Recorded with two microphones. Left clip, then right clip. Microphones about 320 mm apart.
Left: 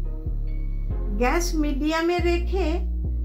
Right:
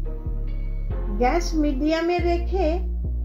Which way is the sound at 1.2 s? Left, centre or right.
Centre.